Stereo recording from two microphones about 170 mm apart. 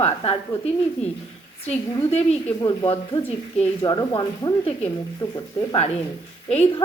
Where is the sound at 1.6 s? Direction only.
40° left (ahead or behind).